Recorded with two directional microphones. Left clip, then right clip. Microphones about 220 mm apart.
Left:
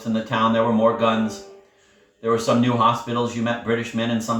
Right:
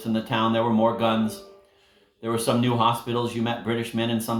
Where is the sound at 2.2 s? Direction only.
50° right (ahead or behind).